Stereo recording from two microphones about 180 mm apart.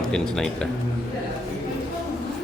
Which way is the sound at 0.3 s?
5° left (ahead or behind).